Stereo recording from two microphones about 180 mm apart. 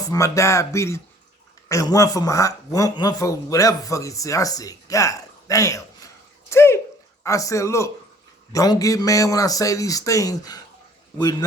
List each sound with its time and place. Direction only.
0.1 s speech: 15° left (ahead or behind)